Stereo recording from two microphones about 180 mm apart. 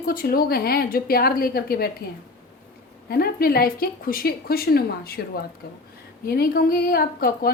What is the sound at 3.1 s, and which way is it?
A woman's voice, 60° left (ahead or behind).